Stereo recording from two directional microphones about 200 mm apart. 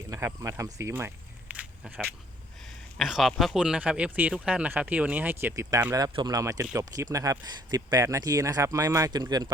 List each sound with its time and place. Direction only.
0.1 s speech: 15° right (ahead or behind)